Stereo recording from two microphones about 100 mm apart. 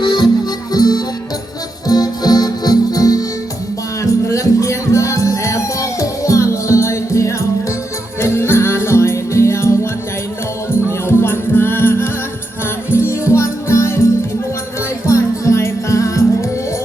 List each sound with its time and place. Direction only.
0.0 s music: 45° left (ahead or behind); by 16.5 s 30° left (ahead or behind)